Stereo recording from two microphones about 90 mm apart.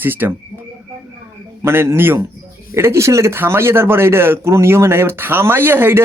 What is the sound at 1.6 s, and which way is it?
A man's voice, 25° right (ahead or behind).